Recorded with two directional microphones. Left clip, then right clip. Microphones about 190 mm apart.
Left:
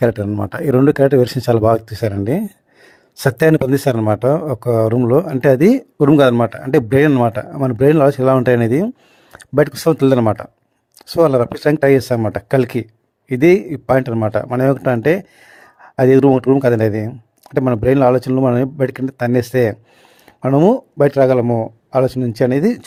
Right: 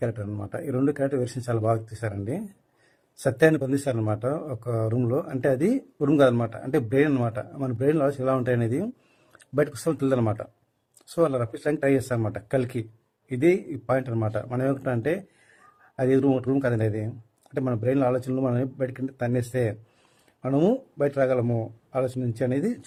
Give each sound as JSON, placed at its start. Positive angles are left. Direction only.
{"t": 0.0, "sound": "speech", "side_deg": 50}
{"t": 21.0, "sound": "speech", "side_deg": 45}